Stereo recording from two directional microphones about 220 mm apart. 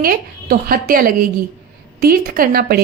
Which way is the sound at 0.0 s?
45° right (ahead or behind).